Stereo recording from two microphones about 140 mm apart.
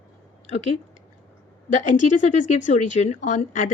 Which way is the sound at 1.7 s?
60° left (ahead or behind).